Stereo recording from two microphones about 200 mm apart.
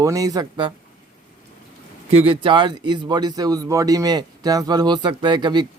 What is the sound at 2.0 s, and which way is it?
Speech, 30° right (ahead or behind).